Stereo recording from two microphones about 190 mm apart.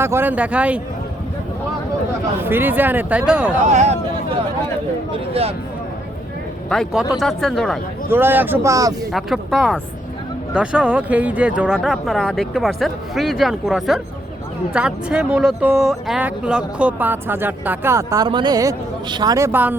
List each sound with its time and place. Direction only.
0.0 s speech: 10° right (ahead or behind)
2.4 s speech: 10° right (ahead or behind)
3.6 s speech: 35° right (ahead or behind)
5.1 s speech: 30° right (ahead or behind)
6.7 s speech: centre (ahead or behind)
8.1 s speech: 10° right (ahead or behind)
9.1 s speech: centre (ahead or behind)